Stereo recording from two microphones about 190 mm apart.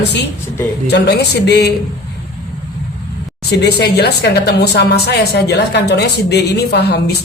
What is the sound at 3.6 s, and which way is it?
A woman's voice, 60° left (ahead or behind).